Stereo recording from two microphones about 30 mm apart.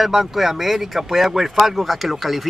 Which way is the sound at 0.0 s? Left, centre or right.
Centre.